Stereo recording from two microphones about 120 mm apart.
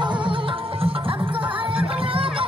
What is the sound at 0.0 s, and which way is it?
Music, 40° right (ahead or behind).